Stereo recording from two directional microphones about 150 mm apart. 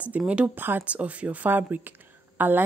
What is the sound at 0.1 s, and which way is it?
Speech, 10° right (ahead or behind).